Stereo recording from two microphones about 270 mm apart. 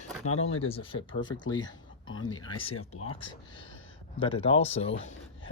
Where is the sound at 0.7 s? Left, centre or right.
Centre.